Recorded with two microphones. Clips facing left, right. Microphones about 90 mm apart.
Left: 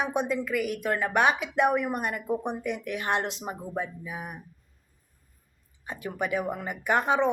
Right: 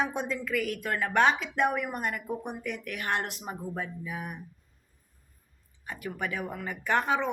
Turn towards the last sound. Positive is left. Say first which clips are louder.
# left 3 dB
turn(degrees=20)  # may be behind; listen again after turning